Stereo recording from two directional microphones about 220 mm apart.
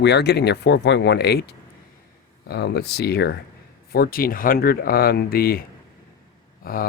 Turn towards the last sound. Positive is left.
turn(degrees=40)  # may be behind; listen again after turning